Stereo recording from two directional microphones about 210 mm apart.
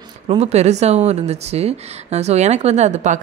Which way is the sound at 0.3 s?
30° right (ahead or behind).